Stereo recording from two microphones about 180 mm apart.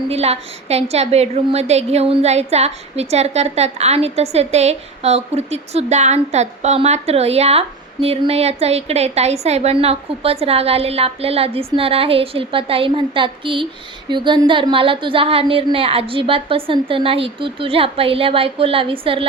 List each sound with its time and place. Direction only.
0.1 s a woman's voice: 35° right (ahead or behind)